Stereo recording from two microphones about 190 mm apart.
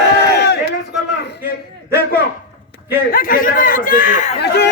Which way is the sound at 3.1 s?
50° left (ahead or behind).